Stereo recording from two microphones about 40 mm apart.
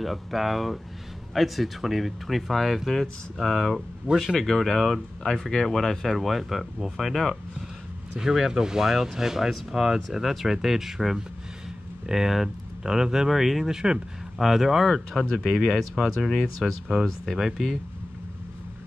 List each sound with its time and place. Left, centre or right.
0.0 s speech: centre
4.1 s speech: right
4.4 s speech: centre
5.2 s speech: centre
6.1 s speech: centre
8.2 s speech: centre
13.3 s speech: centre
13.7 s speech: centre
14.5 s speech: centre